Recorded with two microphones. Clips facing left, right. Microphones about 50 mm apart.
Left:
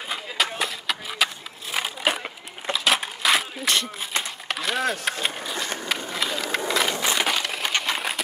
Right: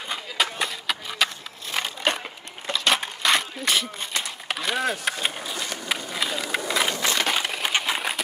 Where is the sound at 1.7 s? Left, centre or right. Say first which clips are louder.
Even; centre.